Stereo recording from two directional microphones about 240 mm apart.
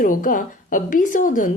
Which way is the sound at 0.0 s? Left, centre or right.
Left.